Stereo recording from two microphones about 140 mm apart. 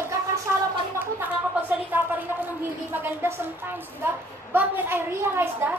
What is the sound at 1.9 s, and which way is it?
Speech, 10° right (ahead or behind).